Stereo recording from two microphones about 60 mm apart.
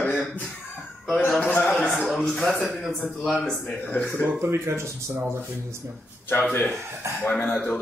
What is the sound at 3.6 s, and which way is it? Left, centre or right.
Speech, left.